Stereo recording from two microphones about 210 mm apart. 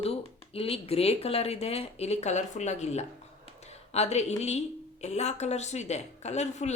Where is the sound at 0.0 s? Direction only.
25° left (ahead or behind).